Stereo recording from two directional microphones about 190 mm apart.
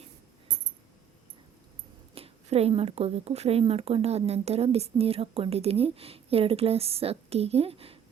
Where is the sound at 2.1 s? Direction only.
30° right (ahead or behind).